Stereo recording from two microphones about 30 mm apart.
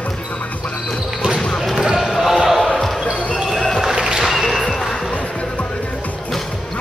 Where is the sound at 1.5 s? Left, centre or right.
Centre.